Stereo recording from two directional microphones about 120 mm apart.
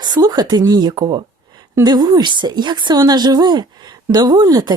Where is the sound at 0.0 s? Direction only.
35° right (ahead or behind).